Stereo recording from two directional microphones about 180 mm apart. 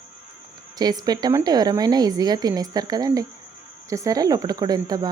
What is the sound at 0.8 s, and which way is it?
A woman's voice, 20° right (ahead or behind).